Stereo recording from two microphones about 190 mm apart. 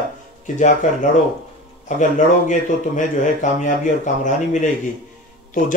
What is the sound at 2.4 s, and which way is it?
Speech, 40° left (ahead or behind).